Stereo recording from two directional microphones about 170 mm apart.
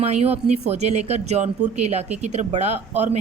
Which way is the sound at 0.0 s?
40° right (ahead or behind).